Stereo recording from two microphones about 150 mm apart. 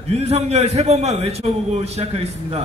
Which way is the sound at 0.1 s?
45° right (ahead or behind).